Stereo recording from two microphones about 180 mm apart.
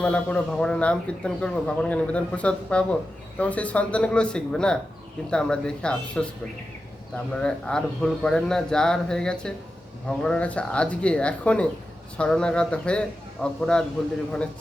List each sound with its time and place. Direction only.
0.0 s speech: 5° left (ahead or behind)
7.3 s speech: 5° left (ahead or behind)